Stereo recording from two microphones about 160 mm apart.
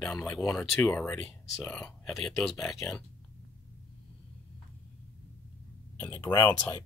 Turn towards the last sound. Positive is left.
turn(degrees=20)  # may be behind; listen again after turning